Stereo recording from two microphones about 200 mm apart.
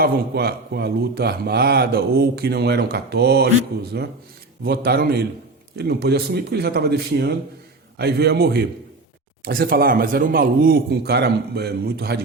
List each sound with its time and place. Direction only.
0.0 s speech: 50° right (ahead or behind)